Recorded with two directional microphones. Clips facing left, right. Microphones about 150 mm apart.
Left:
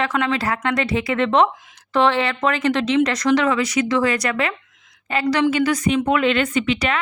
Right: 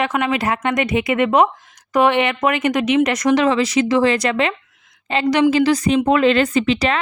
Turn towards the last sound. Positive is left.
turn(degrees=-35)  # may be behind; listen again after turning